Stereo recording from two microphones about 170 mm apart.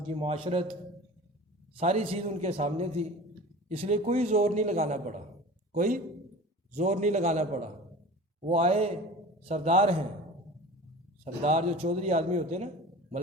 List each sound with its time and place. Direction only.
0.1 s a man's voice: 35° right (ahead or behind)
11.4 s a man's voice: 40° right (ahead or behind)